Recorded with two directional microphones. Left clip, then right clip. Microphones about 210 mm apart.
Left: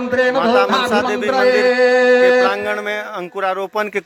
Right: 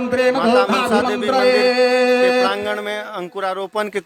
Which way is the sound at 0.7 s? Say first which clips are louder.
Left 1 dB; 30° right (ahead or behind).